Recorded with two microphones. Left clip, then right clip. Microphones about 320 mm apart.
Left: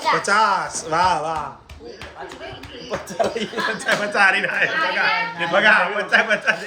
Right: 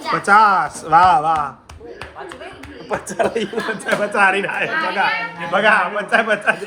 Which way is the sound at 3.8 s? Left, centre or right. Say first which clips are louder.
Right 2 dB; centre.